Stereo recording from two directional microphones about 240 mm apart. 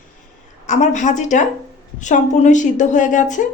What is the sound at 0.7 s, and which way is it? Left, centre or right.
Speech, left.